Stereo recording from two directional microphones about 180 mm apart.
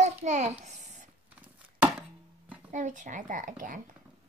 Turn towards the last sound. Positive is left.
turn(degrees=-50)  # may be behind; listen again after turning